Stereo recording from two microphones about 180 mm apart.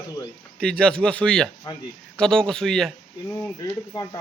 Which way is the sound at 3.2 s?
20° left (ahead or behind).